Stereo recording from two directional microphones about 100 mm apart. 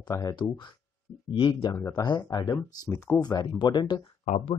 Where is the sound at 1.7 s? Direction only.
25° left (ahead or behind).